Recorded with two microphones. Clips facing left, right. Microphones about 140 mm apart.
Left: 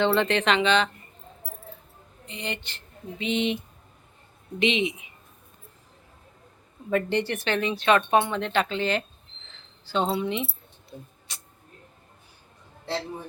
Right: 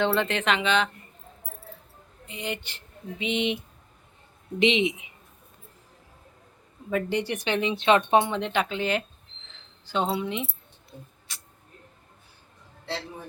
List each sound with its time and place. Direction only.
0.0 s speech: 5° right (ahead or behind)
2.2 s a sound: 5° right (ahead or behind)
4.6 s speech: 20° right (ahead or behind)
6.9 s speech: 10° right (ahead or behind)
10.1 s speech: 5° right (ahead or behind)
11.3 s speech: 20° left (ahead or behind)